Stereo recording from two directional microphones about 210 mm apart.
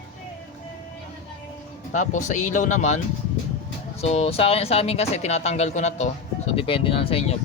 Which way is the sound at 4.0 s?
30° left (ahead or behind).